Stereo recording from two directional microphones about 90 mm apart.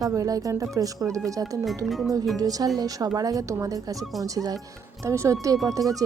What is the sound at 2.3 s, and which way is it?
Speech, 45° right (ahead or behind).